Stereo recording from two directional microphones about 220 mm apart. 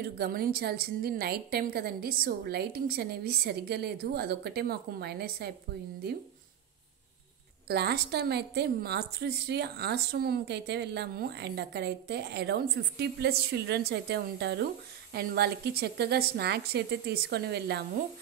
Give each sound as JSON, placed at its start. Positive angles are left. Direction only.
{"t": 0.0, "sound": "a woman's voice", "side_deg": -45}
{"t": 7.6, "sound": "a woman's voice", "side_deg": -45}